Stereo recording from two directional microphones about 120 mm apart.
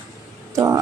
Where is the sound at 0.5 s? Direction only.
30° right (ahead or behind).